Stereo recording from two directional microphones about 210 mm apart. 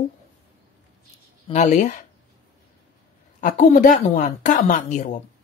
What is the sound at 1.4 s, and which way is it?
Speech, 35° left (ahead or behind).